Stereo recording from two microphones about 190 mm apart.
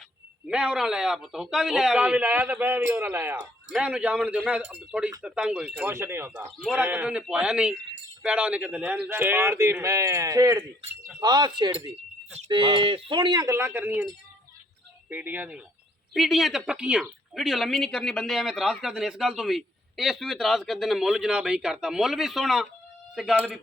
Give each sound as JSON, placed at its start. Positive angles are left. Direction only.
{"t": 0.4, "sound": "a man's voice", "side_deg": -5}
{"t": 15.1, "sound": "a man's voice", "side_deg": -10}